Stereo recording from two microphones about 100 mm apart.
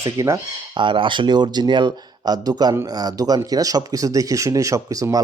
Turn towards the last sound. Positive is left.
turn(degrees=-35)  # may be behind; listen again after turning